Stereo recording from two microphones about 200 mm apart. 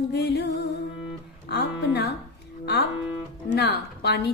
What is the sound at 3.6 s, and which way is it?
Music, 55° left (ahead or behind).